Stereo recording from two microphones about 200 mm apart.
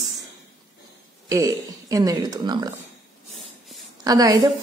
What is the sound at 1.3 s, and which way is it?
Speech, 15° right (ahead or behind).